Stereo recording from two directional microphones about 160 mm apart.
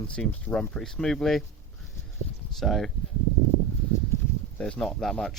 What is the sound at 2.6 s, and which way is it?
Speech, centre (ahead or behind).